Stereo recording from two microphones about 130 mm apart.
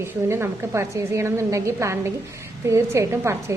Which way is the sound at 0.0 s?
20° right (ahead or behind).